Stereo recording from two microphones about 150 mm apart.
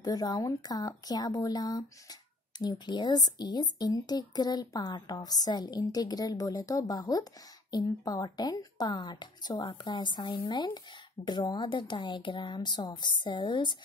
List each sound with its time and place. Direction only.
0.0 s a woman's voice: 25° left (ahead or behind)